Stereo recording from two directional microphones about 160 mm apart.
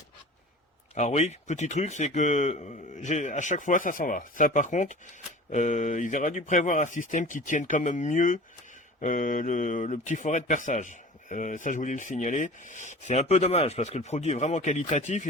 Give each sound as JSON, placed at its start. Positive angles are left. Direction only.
{"t": 0.9, "sound": "speech", "side_deg": 45}